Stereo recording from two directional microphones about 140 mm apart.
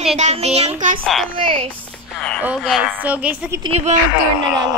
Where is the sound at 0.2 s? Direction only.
50° right (ahead or behind).